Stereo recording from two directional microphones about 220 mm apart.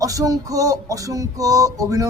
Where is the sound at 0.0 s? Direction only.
15° right (ahead or behind).